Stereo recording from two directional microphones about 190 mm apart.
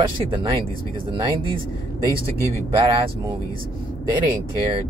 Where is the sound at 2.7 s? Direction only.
25° right (ahead or behind).